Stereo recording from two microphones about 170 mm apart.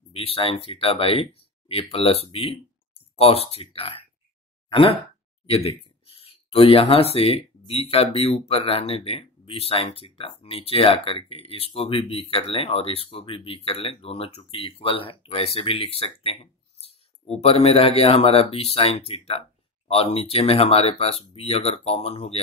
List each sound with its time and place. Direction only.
0.1 s speech: 35° left (ahead or behind)
17.4 s speech: 35° left (ahead or behind)